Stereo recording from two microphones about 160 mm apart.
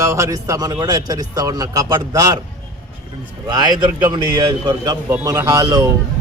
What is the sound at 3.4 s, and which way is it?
A man's voice, 25° right (ahead or behind).